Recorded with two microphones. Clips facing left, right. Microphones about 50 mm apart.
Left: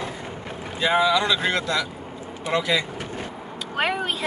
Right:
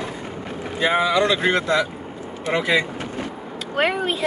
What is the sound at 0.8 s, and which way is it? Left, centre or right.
Speech, right.